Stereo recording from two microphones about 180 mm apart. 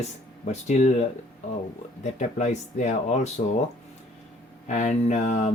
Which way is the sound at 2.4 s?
40° left (ahead or behind).